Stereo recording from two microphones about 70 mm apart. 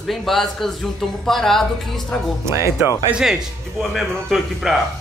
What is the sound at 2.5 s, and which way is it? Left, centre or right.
Speech, right.